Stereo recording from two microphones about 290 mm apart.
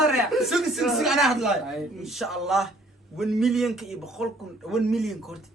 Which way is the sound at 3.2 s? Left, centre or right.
Centre.